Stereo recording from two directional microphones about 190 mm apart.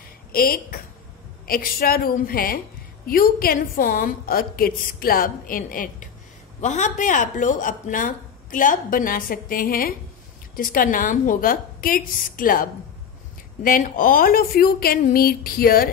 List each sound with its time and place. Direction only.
0.3 s speech: 50° left (ahead or behind)